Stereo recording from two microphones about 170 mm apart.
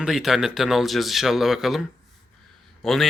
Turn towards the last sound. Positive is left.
turn(degrees=0)  # may be behind; listen again after turning